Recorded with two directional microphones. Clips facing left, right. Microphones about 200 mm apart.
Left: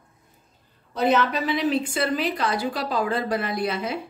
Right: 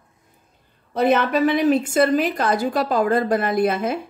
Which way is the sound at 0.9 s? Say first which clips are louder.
Right 3 dB; 55° right (ahead or behind).